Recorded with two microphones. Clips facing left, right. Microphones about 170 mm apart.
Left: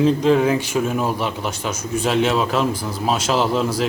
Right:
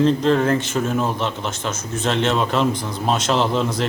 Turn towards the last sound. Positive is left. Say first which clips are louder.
# left 1 dB
turn(degrees=5)  # may be behind; listen again after turning